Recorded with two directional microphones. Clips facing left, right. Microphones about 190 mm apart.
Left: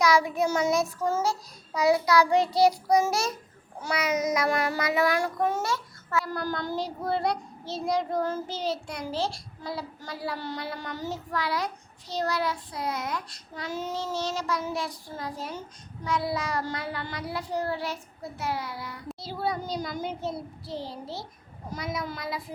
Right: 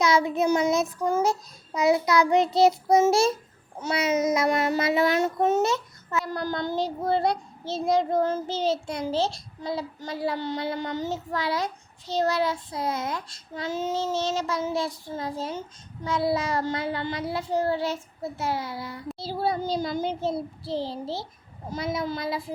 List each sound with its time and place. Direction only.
0.0 s child singing: 25° right (ahead or behind)